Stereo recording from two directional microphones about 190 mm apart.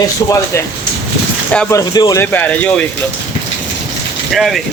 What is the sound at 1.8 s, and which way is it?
Speech, 20° left (ahead or behind).